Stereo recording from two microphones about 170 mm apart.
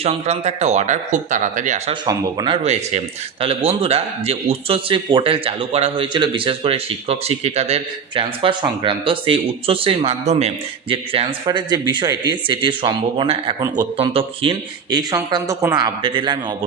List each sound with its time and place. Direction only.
0.0 s speech: 40° right (ahead or behind)
1.9 s a man's voice: 30° right (ahead or behind)